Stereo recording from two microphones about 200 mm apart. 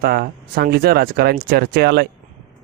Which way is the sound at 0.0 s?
50° right (ahead or behind).